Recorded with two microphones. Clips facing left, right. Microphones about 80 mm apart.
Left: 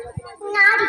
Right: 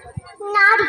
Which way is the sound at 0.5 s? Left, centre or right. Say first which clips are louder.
Right 2 dB; right.